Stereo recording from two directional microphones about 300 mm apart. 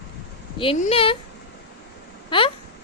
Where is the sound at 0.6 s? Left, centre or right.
Centre.